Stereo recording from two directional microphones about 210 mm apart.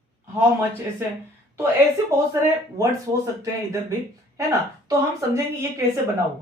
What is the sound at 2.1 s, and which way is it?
Speech, 15° right (ahead or behind).